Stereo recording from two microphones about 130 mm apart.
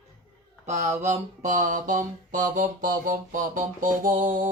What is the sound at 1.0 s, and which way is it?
Mantra, 70° right (ahead or behind).